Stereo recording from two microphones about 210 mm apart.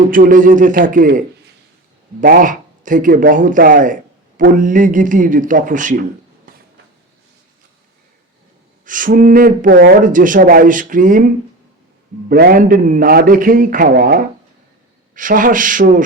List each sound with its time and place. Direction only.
0.1 s speech: 40° right (ahead or behind)
2.2 s speech: 40° right (ahead or behind)
8.8 s speech: 40° right (ahead or behind)
12.3 s a man's voice: 45° right (ahead or behind)